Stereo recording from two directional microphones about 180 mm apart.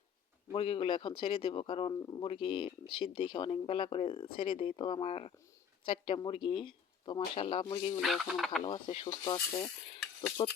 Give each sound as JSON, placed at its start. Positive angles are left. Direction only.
{"t": 0.5, "sound": "speech", "side_deg": 30}
{"t": 8.0, "sound": "speech", "side_deg": 0}
{"t": 8.6, "sound": "speech", "side_deg": 25}